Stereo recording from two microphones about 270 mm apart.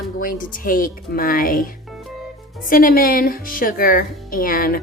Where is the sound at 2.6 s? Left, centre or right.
Left.